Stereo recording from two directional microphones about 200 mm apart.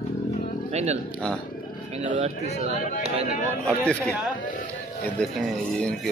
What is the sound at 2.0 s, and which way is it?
Speech, 35° right (ahead or behind).